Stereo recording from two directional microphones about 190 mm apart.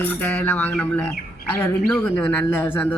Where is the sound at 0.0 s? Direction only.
10° left (ahead or behind).